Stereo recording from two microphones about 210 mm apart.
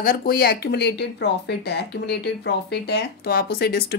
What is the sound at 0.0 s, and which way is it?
Speech, 45° left (ahead or behind).